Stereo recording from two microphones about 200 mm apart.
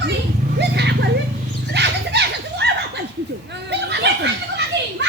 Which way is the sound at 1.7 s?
60° right (ahead or behind).